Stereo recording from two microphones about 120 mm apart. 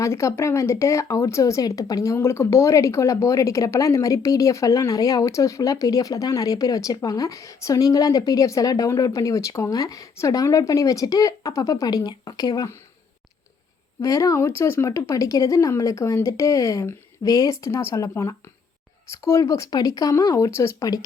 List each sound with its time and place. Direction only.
0.0 s speech: 25° left (ahead or behind)
14.0 s speech: 25° left (ahead or behind)